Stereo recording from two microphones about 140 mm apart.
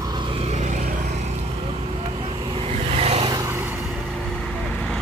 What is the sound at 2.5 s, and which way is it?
Vehicle, 45° right (ahead or behind).